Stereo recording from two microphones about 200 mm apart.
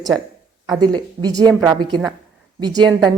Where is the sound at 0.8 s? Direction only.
20° right (ahead or behind).